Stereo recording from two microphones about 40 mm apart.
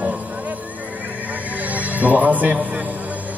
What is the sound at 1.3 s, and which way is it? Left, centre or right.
Neigh, right.